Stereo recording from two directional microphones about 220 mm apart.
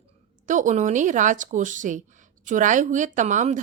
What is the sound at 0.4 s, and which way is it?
Speech, 35° right (ahead or behind).